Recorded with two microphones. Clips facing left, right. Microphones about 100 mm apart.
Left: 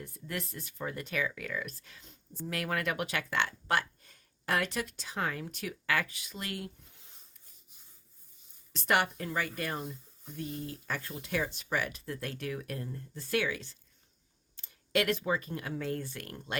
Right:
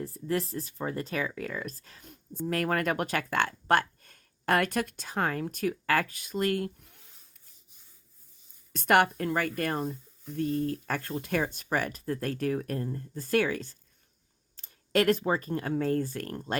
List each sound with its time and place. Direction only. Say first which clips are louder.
0.0 s speech: right 9 dB; 35° right (ahead or behind)
8.7 s speech: right 6 dB; 50° right (ahead or behind)